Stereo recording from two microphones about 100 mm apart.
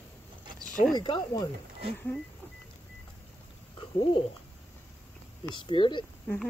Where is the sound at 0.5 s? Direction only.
5° left (ahead or behind).